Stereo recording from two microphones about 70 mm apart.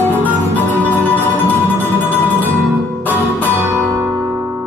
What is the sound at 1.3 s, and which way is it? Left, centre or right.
Music, left.